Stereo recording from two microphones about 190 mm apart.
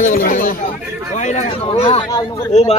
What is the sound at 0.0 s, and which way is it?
Speech, 45° left (ahead or behind).